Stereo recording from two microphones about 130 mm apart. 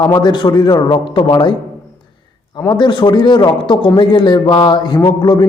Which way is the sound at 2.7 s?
35° left (ahead or behind).